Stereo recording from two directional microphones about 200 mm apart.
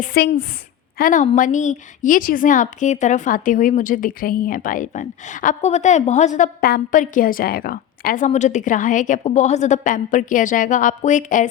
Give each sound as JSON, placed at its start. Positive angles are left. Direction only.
{"t": 0.0, "sound": "a woman's voice", "side_deg": 50}